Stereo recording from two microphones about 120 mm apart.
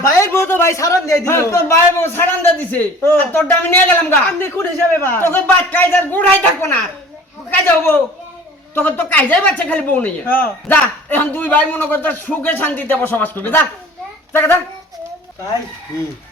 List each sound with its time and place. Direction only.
0.0 s a man's voice: 20° left (ahead or behind)